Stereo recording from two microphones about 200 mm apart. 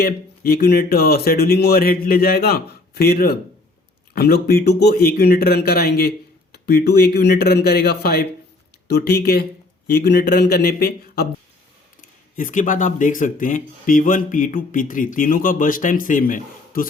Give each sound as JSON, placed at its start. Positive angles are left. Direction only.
{"t": 0.0, "sound": "speech", "side_deg": 50}
{"t": 12.4, "sound": "speech", "side_deg": 40}